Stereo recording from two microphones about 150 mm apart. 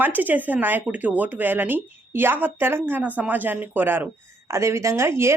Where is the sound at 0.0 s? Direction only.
10° right (ahead or behind).